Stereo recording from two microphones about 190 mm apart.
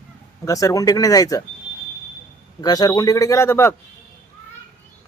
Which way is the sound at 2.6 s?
20° left (ahead or behind).